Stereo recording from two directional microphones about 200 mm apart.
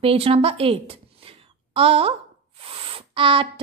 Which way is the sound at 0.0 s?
30° right (ahead or behind).